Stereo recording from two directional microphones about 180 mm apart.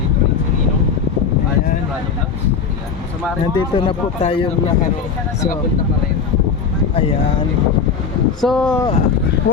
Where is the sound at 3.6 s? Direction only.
30° left (ahead or behind).